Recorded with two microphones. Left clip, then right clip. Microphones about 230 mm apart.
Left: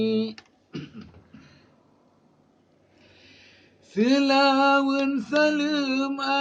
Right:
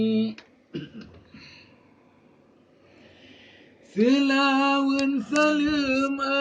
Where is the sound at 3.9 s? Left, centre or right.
Centre.